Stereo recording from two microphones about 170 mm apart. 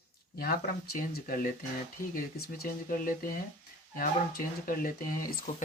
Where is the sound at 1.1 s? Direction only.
55° left (ahead or behind).